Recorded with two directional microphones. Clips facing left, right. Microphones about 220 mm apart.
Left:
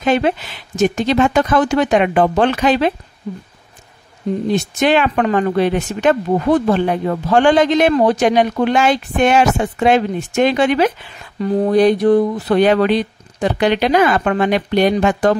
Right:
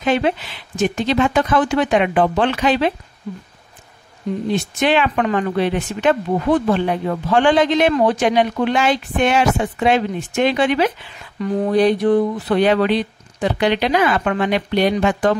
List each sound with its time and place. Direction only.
0.0 s speech: 45° left (ahead or behind)
4.5 s speech: 45° left (ahead or behind)